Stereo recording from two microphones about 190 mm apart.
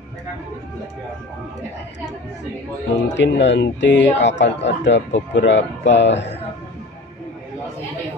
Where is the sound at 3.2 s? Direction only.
70° left (ahead or behind).